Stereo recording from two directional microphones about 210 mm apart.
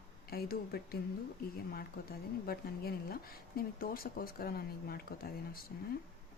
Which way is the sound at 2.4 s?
45° left (ahead or behind).